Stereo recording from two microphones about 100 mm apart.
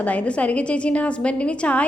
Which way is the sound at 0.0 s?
15° left (ahead or behind).